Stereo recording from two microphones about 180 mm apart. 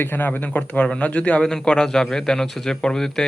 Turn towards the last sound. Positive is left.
turn(degrees=5)  # may be behind; listen again after turning